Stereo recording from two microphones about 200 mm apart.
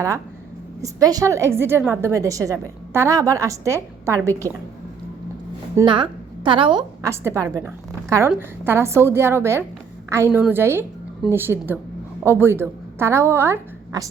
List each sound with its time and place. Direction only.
0.8 s a woman's voice: 15° right (ahead or behind)
5.7 s a woman's voice: 25° right (ahead or behind)